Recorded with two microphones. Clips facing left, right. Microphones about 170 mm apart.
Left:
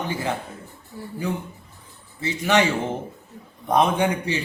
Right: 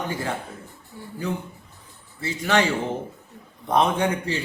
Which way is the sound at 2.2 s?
20° left (ahead or behind).